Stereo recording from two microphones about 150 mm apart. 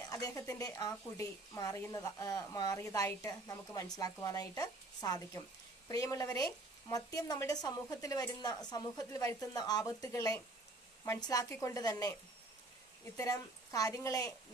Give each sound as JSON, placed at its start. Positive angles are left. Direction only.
{"t": 0.1, "sound": "speech", "side_deg": 25}
{"t": 13.1, "sound": "speech", "side_deg": 25}